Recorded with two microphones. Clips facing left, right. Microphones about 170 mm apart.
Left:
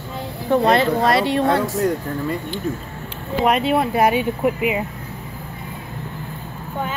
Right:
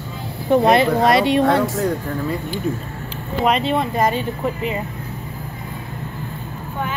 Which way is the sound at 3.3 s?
5° left (ahead or behind).